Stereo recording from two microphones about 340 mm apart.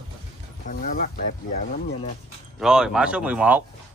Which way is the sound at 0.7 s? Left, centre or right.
Left.